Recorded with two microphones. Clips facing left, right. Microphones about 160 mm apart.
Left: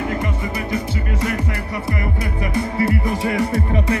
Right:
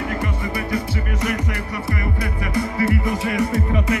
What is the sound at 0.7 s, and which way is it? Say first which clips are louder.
Music: left 1 dB; 25° left (ahead or behind).